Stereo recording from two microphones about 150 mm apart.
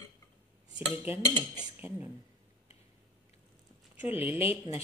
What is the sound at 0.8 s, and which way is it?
Speech, 10° right (ahead or behind).